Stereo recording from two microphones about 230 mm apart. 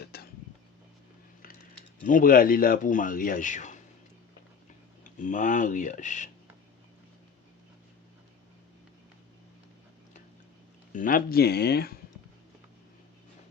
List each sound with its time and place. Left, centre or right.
0.0 s a sound: left
2.0 s speech: left
5.0 s speech: left
10.9 s speech: left